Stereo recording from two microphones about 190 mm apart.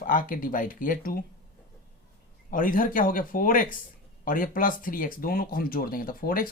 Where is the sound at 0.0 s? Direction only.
45° left (ahead or behind).